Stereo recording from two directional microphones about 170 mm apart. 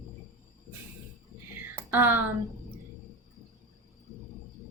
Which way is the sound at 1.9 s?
10° right (ahead or behind).